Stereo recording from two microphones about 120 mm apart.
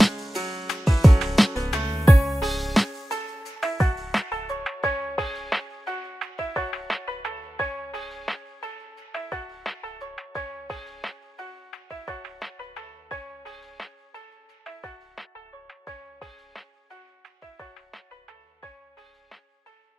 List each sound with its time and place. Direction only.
0.0 s music: centre (ahead or behind)